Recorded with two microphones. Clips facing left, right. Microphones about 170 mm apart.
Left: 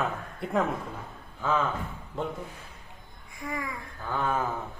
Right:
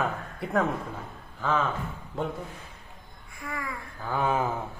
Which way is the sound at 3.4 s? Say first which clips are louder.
Left 2 dB; 20° left (ahead or behind).